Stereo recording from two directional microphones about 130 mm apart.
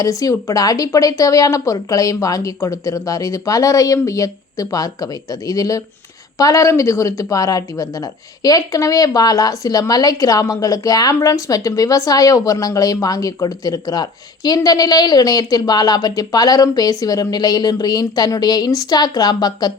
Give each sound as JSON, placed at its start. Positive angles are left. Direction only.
{"t": 0.0, "sound": "a woman's voice", "side_deg": 25}